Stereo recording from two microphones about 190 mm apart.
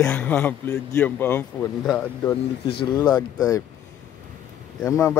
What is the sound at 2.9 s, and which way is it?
Speech, 20° left (ahead or behind).